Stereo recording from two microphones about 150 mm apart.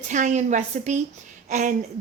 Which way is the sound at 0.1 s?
55° right (ahead or behind).